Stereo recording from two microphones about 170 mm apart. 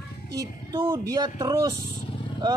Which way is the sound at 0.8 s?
20° right (ahead or behind).